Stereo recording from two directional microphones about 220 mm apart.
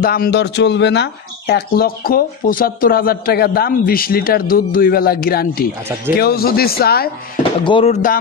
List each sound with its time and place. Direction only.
0.0 s speech: 40° left (ahead or behind)
7.6 s speech: 25° left (ahead or behind)